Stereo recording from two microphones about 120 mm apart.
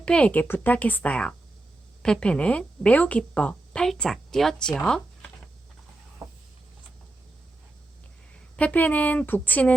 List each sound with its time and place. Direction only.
0.0 s a woman's voice: 10° left (ahead or behind)
6.2 s a sound: 30° right (ahead or behind)
8.5 s a woman's voice: 10° left (ahead or behind)